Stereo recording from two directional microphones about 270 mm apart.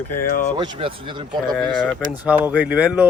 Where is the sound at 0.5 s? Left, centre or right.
Centre.